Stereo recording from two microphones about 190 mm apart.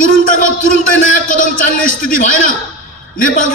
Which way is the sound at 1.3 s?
45° left (ahead or behind).